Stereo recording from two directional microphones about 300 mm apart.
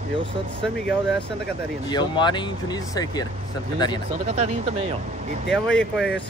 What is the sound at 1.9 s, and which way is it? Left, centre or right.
Speech, centre.